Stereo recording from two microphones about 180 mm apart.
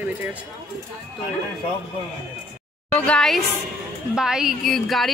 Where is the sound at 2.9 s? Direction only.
5° left (ahead or behind).